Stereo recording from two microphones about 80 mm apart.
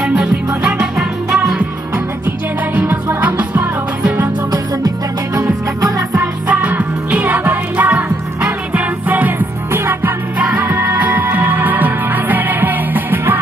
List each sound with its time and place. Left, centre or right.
0.0 s music: centre
2.2 s music: right
4.5 s music: right
6.1 s music: centre